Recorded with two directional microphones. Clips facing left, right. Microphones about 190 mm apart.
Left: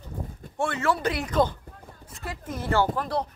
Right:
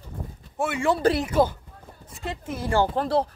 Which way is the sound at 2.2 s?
25° right (ahead or behind).